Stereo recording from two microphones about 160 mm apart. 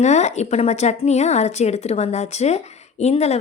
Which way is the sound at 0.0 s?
45° left (ahead or behind).